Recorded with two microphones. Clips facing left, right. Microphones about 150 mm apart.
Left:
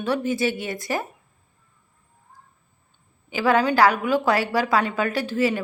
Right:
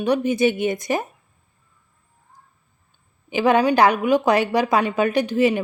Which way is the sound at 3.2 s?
20° right (ahead or behind).